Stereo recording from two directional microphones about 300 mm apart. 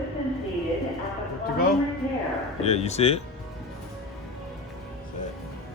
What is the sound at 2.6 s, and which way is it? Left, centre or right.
Speech, left.